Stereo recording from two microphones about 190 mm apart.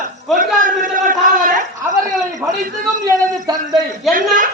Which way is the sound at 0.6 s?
45° right (ahead or behind).